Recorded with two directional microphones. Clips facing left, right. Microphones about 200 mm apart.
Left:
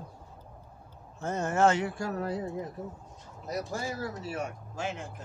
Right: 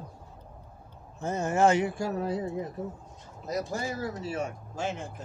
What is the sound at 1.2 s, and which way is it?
Speech, 10° right (ahead or behind).